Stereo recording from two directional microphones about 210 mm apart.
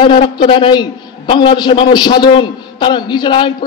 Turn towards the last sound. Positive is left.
turn(degrees=20)  # may be behind; listen again after turning